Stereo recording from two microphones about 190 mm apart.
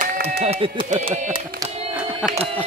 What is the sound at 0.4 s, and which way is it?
Speech, 30° right (ahead or behind).